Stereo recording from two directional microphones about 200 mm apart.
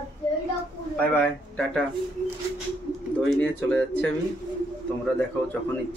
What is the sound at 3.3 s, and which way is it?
Speech, 5° left (ahead or behind).